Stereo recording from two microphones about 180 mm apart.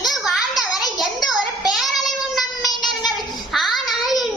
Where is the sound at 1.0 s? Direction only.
Centre (ahead or behind).